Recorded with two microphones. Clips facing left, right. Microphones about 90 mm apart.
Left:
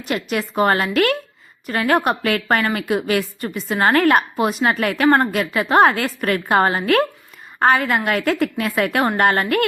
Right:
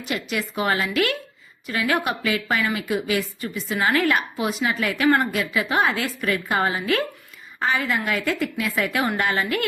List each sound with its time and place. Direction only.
0.1 s a woman's voice: 45° left (ahead or behind)